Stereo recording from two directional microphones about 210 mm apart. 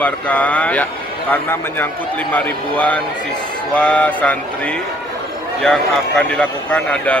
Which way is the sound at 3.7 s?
5° left (ahead or behind).